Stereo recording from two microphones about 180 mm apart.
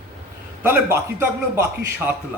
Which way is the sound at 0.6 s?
10° right (ahead or behind).